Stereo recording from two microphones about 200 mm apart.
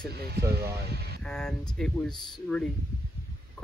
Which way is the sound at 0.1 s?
55° right (ahead or behind).